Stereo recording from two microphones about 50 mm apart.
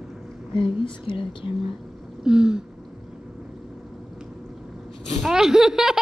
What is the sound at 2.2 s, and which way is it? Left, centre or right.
Speech, centre.